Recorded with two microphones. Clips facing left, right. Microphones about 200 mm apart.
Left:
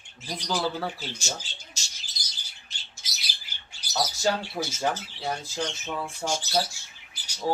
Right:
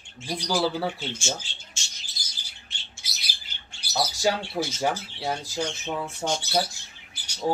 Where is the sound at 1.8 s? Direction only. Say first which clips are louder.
Right 1 dB; 40° left (ahead or behind).